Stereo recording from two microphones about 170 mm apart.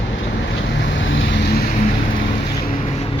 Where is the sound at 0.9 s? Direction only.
90° left.